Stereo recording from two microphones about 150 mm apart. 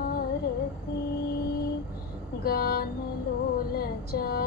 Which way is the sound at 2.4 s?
90° left.